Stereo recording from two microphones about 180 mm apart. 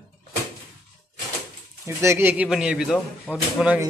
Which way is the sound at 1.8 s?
15° right (ahead or behind).